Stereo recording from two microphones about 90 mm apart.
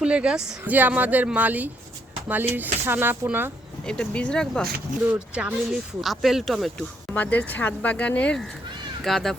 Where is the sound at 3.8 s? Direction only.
10° left (ahead or behind).